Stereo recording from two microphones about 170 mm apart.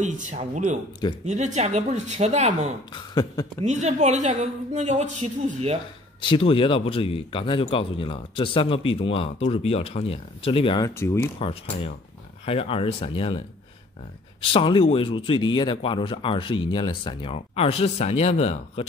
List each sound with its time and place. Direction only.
0.0 s a woman's voice: 45° right (ahead or behind)
2.9 s a sound: 25° left (ahead or behind)
3.6 s a woman's voice: 45° right (ahead or behind)
6.2 s speech: 30° left (ahead or behind)
11.0 s speech: 15° left (ahead or behind)
11.3 s speech: 35° left (ahead or behind)
14.4 s speech: 30° left (ahead or behind)